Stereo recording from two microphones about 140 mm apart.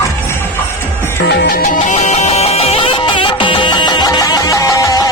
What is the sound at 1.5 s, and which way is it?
Music, 90° left.